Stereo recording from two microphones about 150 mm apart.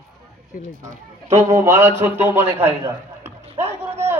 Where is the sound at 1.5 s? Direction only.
15° right (ahead or behind).